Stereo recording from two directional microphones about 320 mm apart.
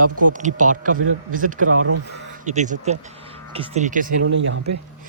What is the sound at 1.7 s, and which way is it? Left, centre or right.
Speech, right.